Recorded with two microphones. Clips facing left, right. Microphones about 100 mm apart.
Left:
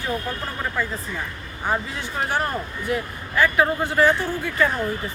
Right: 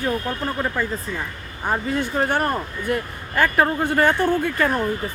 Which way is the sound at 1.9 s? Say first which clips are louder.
Right 4 dB; 55° right (ahead or behind).